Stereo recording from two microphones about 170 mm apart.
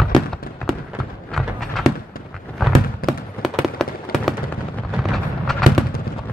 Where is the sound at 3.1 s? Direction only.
Centre (ahead or behind).